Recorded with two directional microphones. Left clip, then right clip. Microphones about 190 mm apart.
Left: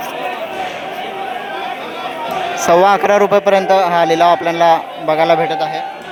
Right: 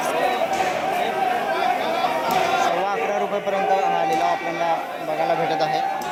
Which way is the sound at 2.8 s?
35° left (ahead or behind).